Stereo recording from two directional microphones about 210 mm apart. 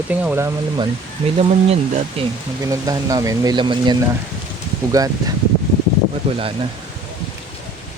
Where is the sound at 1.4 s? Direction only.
30° right (ahead or behind).